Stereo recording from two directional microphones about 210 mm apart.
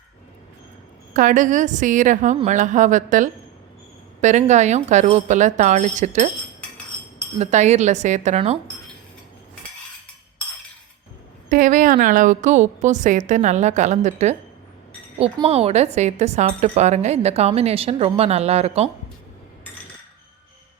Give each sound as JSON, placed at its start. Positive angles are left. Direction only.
{"t": 1.1, "sound": "speech", "side_deg": -40}
{"t": 7.3, "sound": "speech", "side_deg": -35}
{"t": 11.4, "sound": "speech", "side_deg": -40}